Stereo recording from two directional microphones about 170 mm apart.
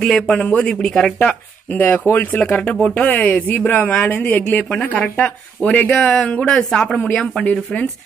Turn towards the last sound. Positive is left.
turn(degrees=5)  # may be behind; listen again after turning